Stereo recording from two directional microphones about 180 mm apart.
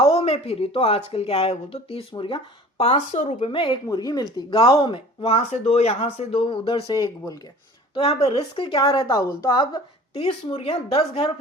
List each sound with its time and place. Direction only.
0.0 s speech: 35° left (ahead or behind)
7.9 s speech: 35° left (ahead or behind)
9.0 s speech: 15° left (ahead or behind)
10.2 s speech: 35° left (ahead or behind)